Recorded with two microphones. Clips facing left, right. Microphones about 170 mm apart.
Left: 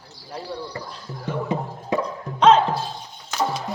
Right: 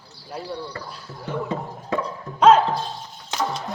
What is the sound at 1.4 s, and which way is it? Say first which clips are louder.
Music: left 2 dB; 15° left (ahead or behind).